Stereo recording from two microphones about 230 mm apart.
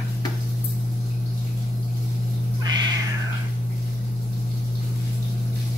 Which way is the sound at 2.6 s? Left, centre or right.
Centre.